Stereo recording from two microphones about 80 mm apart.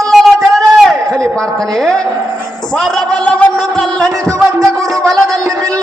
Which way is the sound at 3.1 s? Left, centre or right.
Centre.